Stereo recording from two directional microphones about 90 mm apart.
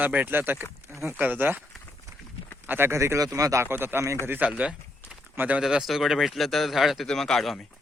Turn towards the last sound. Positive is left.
turn(degrees=5)  # may be behind; listen again after turning